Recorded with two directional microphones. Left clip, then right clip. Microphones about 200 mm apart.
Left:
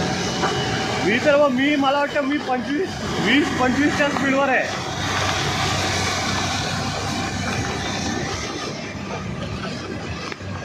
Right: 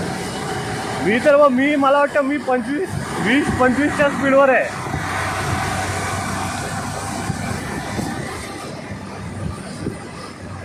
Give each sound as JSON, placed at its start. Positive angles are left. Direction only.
{"t": 1.0, "sound": "speech", "side_deg": -55}